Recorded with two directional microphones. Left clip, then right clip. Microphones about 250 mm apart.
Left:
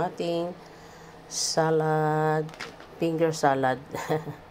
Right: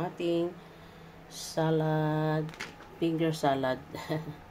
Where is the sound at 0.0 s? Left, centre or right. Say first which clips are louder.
Left 3 dB; centre.